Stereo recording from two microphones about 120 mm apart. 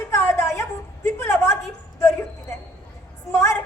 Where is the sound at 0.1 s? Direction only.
25° left (ahead or behind).